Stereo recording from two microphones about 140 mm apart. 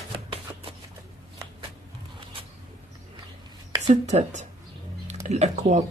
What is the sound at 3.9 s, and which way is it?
Speech, 55° right (ahead or behind).